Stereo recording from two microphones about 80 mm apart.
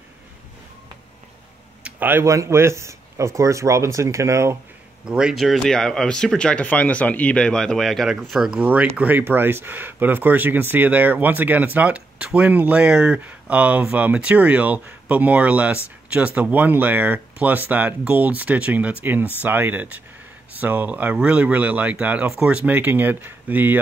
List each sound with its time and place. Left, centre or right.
1.8 s a sound: centre
2.2 s speech: right
5.0 s speech: centre
8.5 s speech: centre